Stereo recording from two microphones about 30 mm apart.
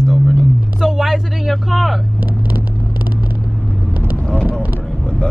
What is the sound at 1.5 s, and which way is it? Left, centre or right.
Speech, centre.